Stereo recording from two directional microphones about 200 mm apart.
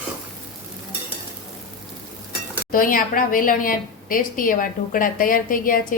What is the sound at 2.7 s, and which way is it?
A woman's voice, 45° left (ahead or behind).